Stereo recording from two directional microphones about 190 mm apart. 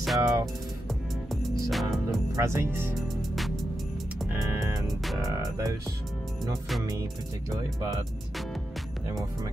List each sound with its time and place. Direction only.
0.2 s speech: 20° right (ahead or behind)
1.7 s music: centre (ahead or behind)
2.3 s speech: 15° right (ahead or behind)
3.2 s music: centre (ahead or behind)
4.3 s music: 15° right (ahead or behind)
4.8 s music: centre (ahead or behind)
5.2 s speech: 20° right (ahead or behind)